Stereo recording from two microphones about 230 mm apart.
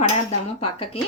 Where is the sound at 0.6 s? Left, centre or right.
Left.